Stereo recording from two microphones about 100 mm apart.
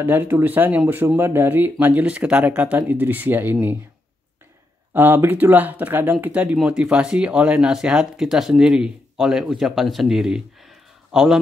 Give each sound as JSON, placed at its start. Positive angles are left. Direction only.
{"t": 0.0, "sound": "speech", "side_deg": -20}
{"t": 4.9, "sound": "speech", "side_deg": -20}